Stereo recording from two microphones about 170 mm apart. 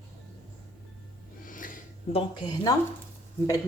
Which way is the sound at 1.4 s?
55° left (ahead or behind).